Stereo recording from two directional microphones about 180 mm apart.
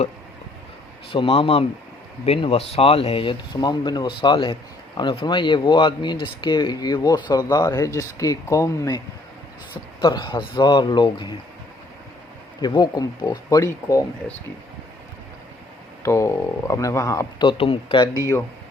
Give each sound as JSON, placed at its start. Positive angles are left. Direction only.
{"t": 1.1, "sound": "speech", "side_deg": 30}
{"t": 12.6, "sound": "speech", "side_deg": 20}
{"t": 16.0, "sound": "speech", "side_deg": 15}
{"t": 17.6, "sound": "speech", "side_deg": 30}